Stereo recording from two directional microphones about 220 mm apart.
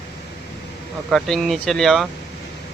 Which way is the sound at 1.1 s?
Centre (ahead or behind).